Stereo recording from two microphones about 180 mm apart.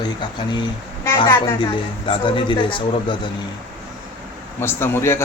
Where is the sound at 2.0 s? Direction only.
30° left (ahead or behind).